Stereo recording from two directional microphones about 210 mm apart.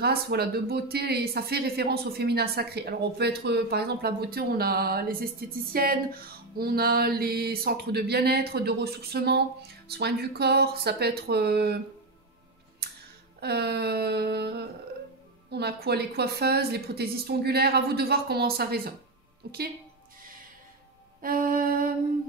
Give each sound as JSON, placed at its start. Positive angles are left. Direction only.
{"t": 0.0, "sound": "speech", "side_deg": -50}
{"t": 13.4, "sound": "speech", "side_deg": -50}
{"t": 21.2, "sound": "music", "side_deg": -45}